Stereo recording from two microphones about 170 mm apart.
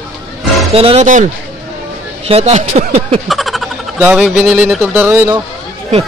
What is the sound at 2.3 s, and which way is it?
Speech, 40° right (ahead or behind).